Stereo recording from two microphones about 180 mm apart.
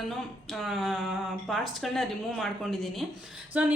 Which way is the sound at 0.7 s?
Centre (ahead or behind).